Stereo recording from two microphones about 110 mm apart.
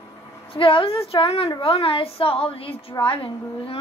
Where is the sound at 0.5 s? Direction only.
55° left (ahead or behind).